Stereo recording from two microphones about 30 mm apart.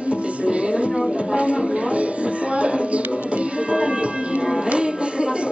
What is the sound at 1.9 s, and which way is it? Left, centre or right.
Music, right.